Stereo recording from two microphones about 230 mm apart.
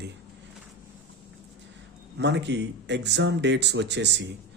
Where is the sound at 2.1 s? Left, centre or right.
Right.